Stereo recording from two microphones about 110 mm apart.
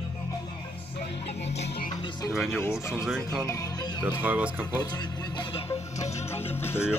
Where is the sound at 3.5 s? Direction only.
35° left (ahead or behind).